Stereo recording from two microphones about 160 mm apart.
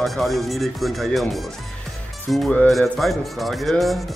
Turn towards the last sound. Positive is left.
turn(degrees=0)  # may be behind; listen again after turning